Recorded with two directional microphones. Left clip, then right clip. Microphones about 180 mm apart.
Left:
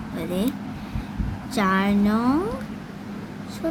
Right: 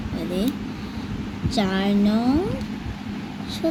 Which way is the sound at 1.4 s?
40° left (ahead or behind).